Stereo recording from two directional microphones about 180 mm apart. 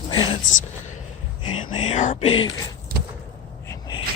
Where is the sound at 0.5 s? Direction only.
90° left.